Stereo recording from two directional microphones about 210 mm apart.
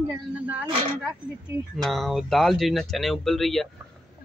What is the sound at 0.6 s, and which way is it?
Speech, 25° right (ahead or behind).